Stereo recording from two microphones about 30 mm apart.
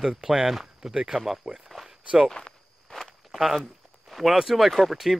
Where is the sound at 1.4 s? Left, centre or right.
Right.